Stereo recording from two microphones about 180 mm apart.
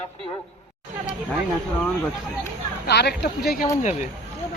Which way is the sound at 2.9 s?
70° left (ahead or behind).